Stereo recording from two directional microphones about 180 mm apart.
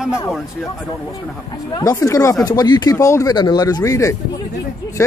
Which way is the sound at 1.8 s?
20° left (ahead or behind).